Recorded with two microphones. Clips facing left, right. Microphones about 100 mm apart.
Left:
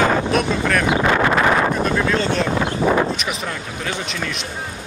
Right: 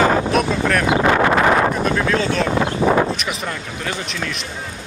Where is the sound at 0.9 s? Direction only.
40° right (ahead or behind).